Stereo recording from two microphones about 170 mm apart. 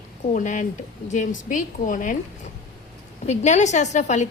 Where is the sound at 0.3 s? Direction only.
45° left (ahead or behind).